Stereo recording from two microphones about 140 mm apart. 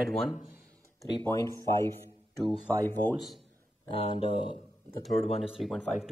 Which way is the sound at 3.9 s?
45° left (ahead or behind).